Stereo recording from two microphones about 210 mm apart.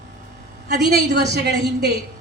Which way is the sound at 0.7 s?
55° right (ahead or behind).